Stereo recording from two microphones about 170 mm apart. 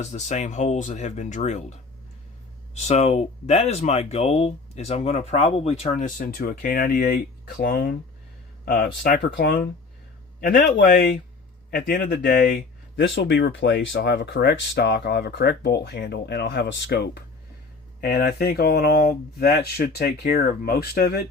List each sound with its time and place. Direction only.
0.0 s speech: 45° left (ahead or behind)
9.0 s speech: 70° left (ahead or behind)
10.4 s speech: 55° left (ahead or behind)
11.7 s speech: 70° left (ahead or behind)
18.0 s speech: 65° left (ahead or behind)